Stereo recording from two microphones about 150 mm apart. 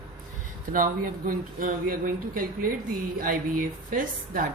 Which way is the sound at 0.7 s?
70° right (ahead or behind).